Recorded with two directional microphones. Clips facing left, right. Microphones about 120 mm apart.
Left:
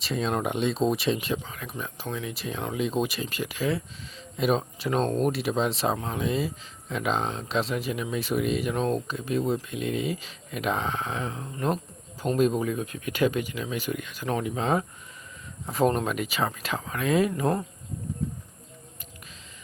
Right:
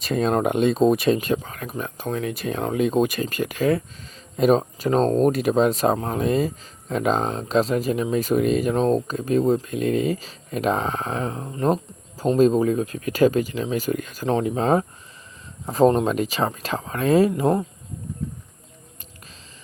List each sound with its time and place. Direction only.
0.0 s speech: 50° right (ahead or behind); by 17.5 s 30° right (ahead or behind)